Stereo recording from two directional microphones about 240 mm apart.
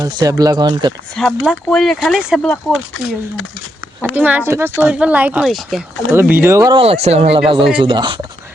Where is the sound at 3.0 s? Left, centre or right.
Left.